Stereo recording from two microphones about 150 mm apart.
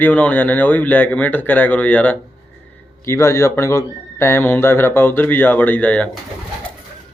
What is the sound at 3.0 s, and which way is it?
Speech, 20° left (ahead or behind).